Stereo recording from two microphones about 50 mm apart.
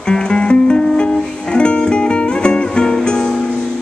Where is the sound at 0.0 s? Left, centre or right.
Centre.